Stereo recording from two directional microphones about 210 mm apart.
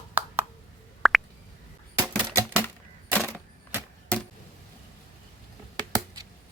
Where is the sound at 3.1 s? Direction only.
10° right (ahead or behind).